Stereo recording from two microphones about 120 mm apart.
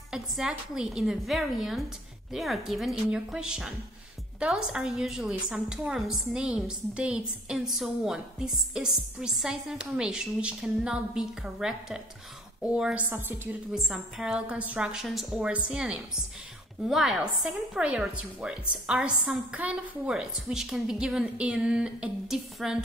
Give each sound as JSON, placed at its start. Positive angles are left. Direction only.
{"t": 0.1, "sound": "a woman's voice", "side_deg": -5}
{"t": 13.7, "sound": "a woman's voice", "side_deg": 0}